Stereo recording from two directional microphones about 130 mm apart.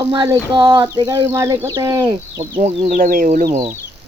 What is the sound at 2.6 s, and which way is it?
Speech, 60° right (ahead or behind).